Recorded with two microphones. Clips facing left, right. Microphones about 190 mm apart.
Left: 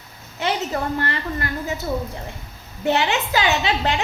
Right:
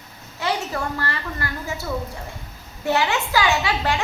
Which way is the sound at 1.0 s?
20° left (ahead or behind).